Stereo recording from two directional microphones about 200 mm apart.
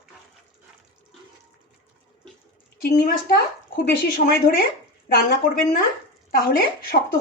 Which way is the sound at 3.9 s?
45° left (ahead or behind).